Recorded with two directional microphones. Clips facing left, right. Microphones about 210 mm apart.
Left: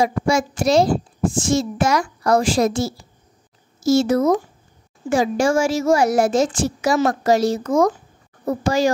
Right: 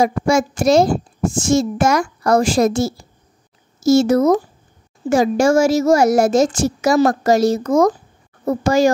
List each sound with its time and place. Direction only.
0.0 s a child's voice: 45° right (ahead or behind)